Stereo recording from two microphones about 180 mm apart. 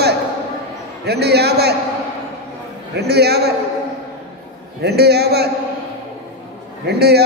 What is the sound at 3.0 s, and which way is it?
Speech, 65° right (ahead or behind).